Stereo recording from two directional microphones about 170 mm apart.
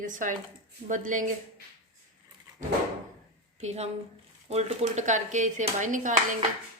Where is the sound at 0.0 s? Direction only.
50° right (ahead or behind).